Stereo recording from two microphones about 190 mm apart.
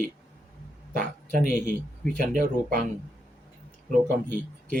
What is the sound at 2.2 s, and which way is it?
Speech, 45° right (ahead or behind).